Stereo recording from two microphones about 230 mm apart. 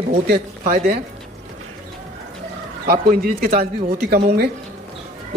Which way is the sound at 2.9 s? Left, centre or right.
Right.